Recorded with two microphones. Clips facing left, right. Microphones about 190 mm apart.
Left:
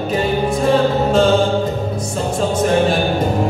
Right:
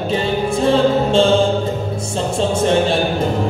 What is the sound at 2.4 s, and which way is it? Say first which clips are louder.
Music: even; 30° right (ahead or behind).